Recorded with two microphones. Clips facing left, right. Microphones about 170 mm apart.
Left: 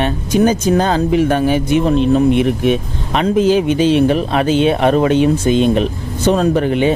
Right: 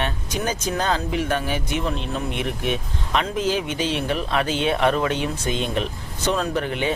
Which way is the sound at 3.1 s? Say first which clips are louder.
Left 10 dB; 25° left (ahead or behind).